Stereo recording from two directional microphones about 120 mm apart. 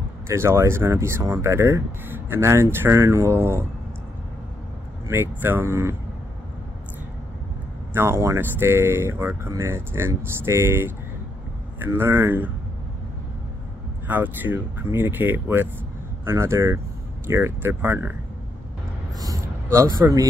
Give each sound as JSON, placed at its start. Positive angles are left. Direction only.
{"t": 0.3, "sound": "speech", "side_deg": -20}
{"t": 5.0, "sound": "speech", "side_deg": -20}
{"t": 7.9, "sound": "speech", "side_deg": -20}
{"t": 14.0, "sound": "speech", "side_deg": -15}
{"t": 19.1, "sound": "a sound", "side_deg": -30}